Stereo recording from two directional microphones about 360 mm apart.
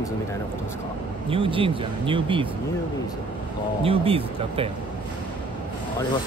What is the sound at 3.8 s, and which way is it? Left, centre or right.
Speech, centre.